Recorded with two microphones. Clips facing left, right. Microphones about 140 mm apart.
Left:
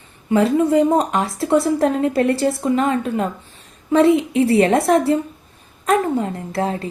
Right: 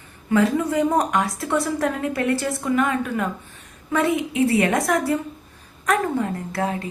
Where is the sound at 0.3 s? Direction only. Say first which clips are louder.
Left 4 dB; 25° left (ahead or behind).